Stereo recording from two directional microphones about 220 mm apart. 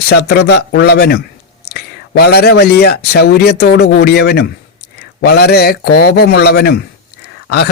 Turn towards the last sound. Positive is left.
turn(degrees=45)  # may be behind; listen again after turning